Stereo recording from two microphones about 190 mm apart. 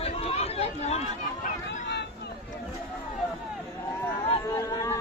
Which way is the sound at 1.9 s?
60° left (ahead or behind).